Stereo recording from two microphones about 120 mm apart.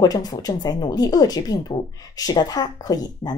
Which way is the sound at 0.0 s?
30° left (ahead or behind).